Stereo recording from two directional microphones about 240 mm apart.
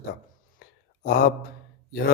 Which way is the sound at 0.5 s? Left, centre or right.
Left.